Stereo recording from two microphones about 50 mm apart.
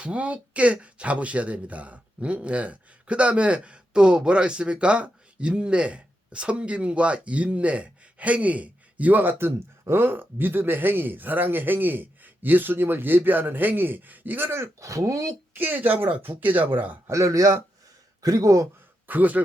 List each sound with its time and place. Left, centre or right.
0.0 s speech: right
9.4 s speech: right
15.5 s speech: right
17.1 s speech: right
19.0 s a man's voice: right